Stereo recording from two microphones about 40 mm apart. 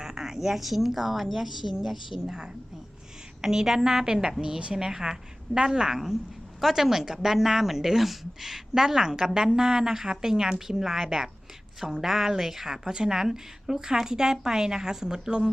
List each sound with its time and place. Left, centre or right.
0.0 s a woman's voice: centre
2.2 s a woman's voice: centre
6.6 s a woman's voice: centre